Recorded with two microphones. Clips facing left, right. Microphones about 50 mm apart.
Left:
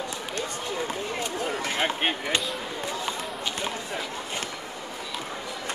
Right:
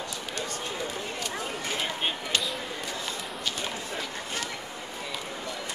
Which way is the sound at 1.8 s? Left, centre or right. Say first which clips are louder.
Left 6 dB; left.